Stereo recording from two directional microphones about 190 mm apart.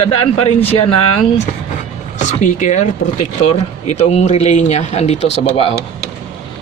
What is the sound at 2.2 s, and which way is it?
Speech, 40° left (ahead or behind).